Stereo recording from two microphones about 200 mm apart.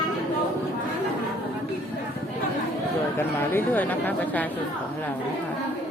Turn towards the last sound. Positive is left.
turn(degrees=10)  # may be behind; listen again after turning